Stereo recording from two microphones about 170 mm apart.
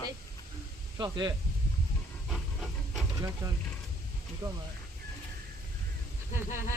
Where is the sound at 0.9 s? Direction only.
25° right (ahead or behind).